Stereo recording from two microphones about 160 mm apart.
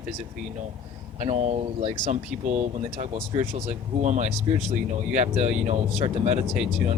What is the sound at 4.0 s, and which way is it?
Speech, 50° right (ahead or behind).